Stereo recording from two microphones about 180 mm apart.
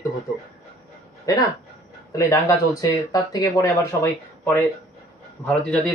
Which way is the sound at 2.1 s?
15° left (ahead or behind).